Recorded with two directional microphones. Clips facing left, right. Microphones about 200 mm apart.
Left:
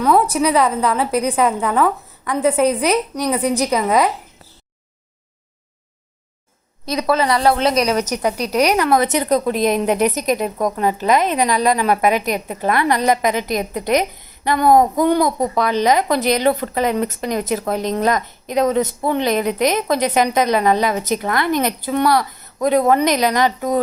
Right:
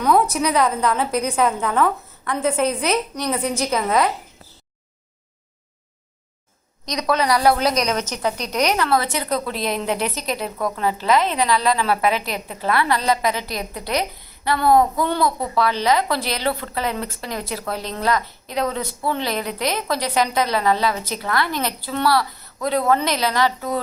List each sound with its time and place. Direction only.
0.0 s a sound: 5° left (ahead or behind)
0.3 s a woman's voice: 5° left (ahead or behind)
6.8 s a woman's voice: 5° left (ahead or behind)